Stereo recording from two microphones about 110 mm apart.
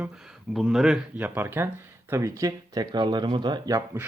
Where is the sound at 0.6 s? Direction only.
Centre (ahead or behind).